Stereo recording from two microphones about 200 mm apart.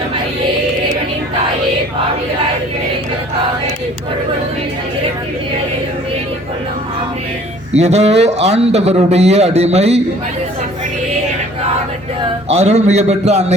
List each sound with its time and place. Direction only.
7.7 s a man's voice: 35° right (ahead or behind)
12.5 s a man's voice: 35° right (ahead or behind)